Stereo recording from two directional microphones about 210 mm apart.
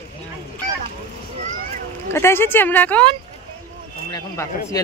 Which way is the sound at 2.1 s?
10° left (ahead or behind).